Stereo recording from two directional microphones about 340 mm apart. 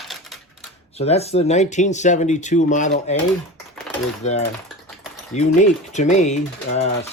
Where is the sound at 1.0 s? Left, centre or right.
Centre.